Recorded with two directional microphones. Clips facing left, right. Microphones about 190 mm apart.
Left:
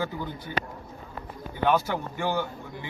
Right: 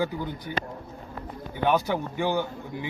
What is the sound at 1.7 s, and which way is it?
Speech, 15° right (ahead or behind).